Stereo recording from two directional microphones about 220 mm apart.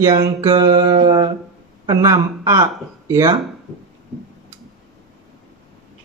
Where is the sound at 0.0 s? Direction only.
15° right (ahead or behind).